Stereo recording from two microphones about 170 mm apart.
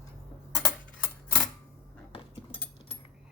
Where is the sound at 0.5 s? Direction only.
15° left (ahead or behind).